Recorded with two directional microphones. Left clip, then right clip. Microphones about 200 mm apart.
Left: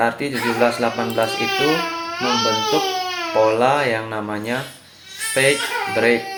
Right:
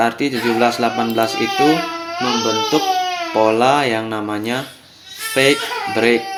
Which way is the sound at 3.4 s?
45° right (ahead or behind).